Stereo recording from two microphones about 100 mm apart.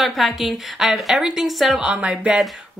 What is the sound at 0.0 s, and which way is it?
Speech, centre (ahead or behind).